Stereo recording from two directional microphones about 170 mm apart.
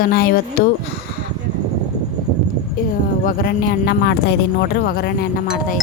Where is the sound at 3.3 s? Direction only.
60° left (ahead or behind).